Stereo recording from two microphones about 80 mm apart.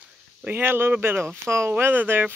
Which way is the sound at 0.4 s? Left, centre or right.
Right.